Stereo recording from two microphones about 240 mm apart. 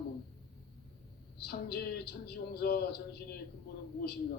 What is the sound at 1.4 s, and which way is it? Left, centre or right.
A woman's voice, left.